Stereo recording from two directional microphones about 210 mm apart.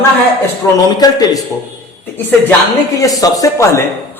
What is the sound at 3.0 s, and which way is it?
Speech, 15° left (ahead or behind).